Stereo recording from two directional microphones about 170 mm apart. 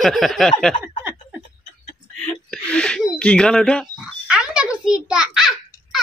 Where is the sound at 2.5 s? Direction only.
5° left (ahead or behind).